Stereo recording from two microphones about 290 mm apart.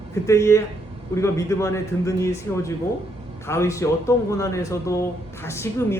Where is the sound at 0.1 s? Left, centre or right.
Centre.